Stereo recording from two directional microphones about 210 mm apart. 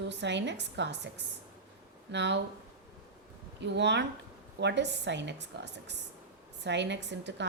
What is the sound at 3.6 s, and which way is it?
A woman's voice, 55° right (ahead or behind).